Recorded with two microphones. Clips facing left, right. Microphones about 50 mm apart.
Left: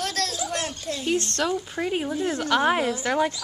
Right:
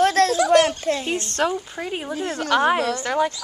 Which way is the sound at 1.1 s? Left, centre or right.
Centre.